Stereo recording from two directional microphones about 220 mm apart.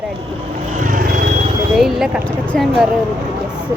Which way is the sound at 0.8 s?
40° right (ahead or behind).